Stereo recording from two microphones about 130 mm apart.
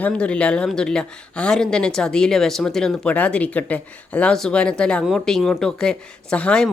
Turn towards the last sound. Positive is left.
turn(degrees=10)  # may be behind; listen again after turning